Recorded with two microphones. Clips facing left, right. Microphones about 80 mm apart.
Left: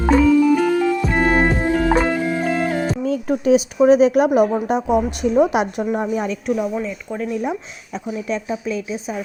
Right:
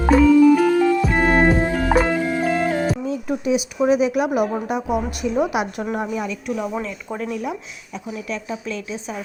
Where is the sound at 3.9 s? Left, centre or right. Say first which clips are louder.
Left 5 dB; left.